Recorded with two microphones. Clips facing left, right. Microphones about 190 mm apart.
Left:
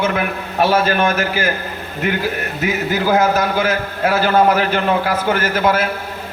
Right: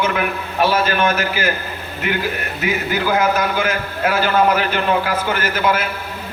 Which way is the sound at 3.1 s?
45° left (ahead or behind).